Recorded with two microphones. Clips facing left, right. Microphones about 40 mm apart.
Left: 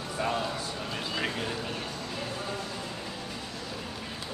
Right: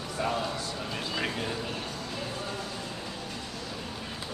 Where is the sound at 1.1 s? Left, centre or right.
Centre.